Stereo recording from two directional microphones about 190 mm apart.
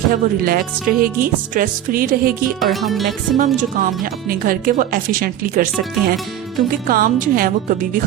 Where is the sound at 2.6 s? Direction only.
Centre (ahead or behind).